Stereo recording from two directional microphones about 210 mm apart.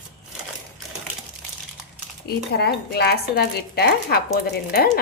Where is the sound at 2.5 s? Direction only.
50° left (ahead or behind).